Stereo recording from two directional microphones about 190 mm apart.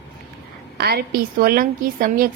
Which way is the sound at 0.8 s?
55° right (ahead or behind).